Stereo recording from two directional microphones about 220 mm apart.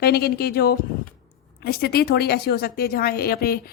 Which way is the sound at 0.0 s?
45° left (ahead or behind).